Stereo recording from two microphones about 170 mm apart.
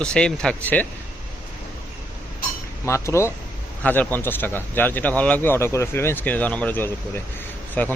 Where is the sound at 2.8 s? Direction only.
15° left (ahead or behind).